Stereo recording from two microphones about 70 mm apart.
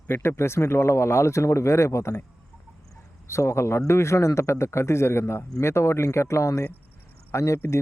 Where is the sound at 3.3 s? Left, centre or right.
Left.